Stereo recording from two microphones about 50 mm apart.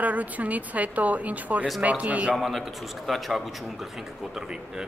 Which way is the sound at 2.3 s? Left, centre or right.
Centre.